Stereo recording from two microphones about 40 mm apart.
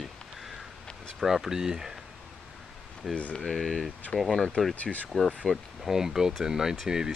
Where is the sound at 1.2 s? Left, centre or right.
Centre.